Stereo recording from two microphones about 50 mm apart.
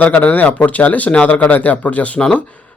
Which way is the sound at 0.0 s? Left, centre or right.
Left.